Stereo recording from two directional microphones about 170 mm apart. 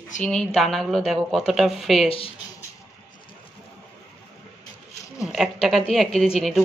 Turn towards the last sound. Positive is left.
turn(degrees=0)  # may be behind; listen again after turning